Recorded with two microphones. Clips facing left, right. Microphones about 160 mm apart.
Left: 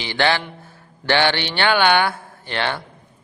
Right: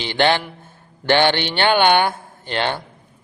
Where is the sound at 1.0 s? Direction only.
15° right (ahead or behind).